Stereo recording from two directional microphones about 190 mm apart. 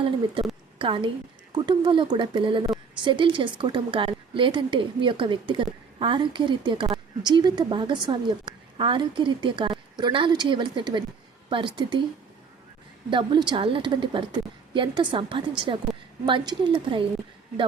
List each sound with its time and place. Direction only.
0.8 s speech: 25° right (ahead or behind)
13.1 s speech: 25° right (ahead or behind)